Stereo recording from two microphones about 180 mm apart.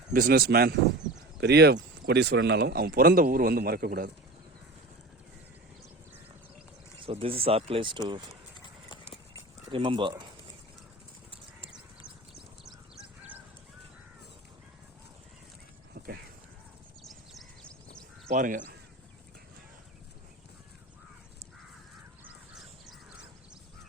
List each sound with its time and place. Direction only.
0.1 s speech: 50° right (ahead or behind)
7.0 s speech: 30° right (ahead or behind)
9.6 s speech: 25° right (ahead or behind)
16.0 s a sound: 55° right (ahead or behind)
17.0 s a sound: centre (ahead or behind)
18.3 s speech: 45° right (ahead or behind)
22.2 s crow: 5° right (ahead or behind)